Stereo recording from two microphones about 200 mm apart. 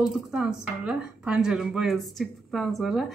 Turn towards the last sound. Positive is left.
turn(degrees=0)  # may be behind; listen again after turning